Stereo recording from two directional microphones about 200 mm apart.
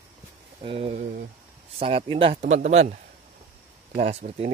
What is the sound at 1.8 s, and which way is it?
Speech, 30° right (ahead or behind).